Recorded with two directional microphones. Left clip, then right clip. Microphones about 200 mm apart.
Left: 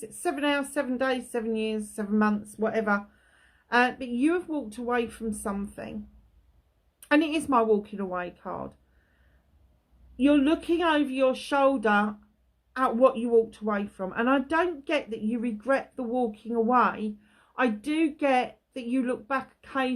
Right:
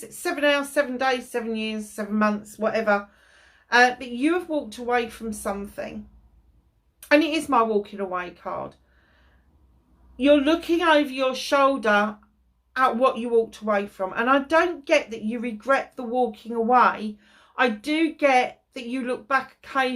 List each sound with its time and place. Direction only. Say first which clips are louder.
0.2 s speech: right 5 dB; 50° left (ahead or behind)
7.1 s speech: right 4 dB; 50° left (ahead or behind)
10.2 s speech: right 5 dB; 50° left (ahead or behind)